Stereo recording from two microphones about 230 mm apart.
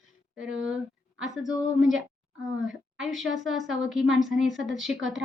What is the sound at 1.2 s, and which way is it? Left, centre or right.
Speech, centre.